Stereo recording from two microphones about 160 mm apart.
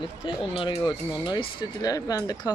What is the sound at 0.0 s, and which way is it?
Speech, 30° left (ahead or behind).